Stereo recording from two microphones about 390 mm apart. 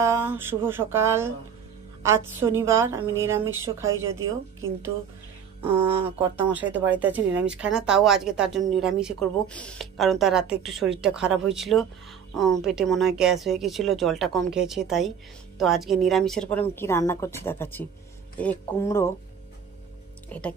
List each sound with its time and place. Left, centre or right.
0.0 s speech: centre
5.6 s a woman's voice: centre
20.2 s speech: centre